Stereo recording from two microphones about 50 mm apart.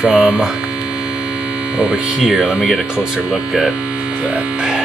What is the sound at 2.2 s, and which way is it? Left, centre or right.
Speech, centre.